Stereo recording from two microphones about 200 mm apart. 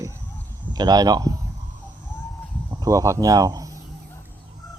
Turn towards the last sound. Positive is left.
turn(degrees=-20)  # may be behind; listen again after turning